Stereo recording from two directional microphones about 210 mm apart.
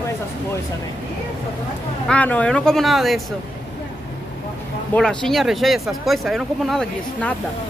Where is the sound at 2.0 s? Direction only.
5° left (ahead or behind).